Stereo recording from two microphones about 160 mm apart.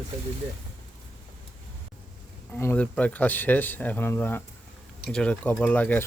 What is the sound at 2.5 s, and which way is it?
Speech, 15° left (ahead or behind).